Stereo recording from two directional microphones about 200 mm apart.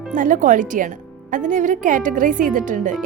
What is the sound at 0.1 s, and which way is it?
A woman's voice, 40° right (ahead or behind).